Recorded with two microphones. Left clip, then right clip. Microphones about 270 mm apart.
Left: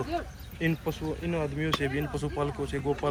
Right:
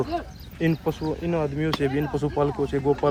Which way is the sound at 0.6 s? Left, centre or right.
Right.